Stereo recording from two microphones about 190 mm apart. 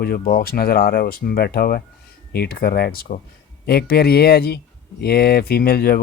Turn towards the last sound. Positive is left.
turn(degrees=55)  # may be behind; listen again after turning